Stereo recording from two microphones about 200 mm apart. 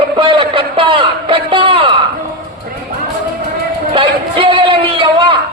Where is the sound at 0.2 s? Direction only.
25° right (ahead or behind).